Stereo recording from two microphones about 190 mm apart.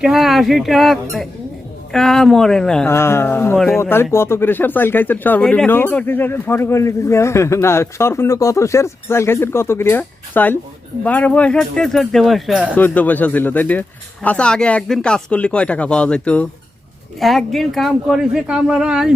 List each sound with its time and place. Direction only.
0.0 s a woman's voice: centre (ahead or behind)
12.7 s a woman's voice: 10° left (ahead or behind)